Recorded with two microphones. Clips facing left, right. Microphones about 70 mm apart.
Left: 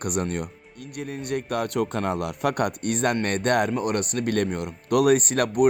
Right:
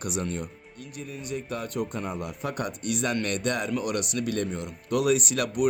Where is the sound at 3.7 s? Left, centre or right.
Left.